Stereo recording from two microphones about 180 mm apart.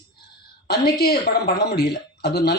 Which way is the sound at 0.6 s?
60° left (ahead or behind).